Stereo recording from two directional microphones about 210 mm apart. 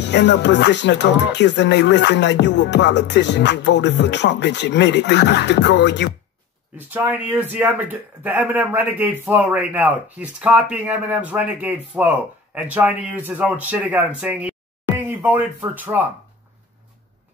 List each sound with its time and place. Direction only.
0.0 s speech: 55° left (ahead or behind)
6.9 s speech: 10° right (ahead or behind)